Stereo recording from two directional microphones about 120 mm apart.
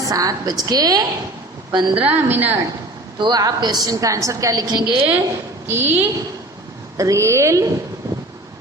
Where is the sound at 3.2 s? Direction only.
35° right (ahead or behind).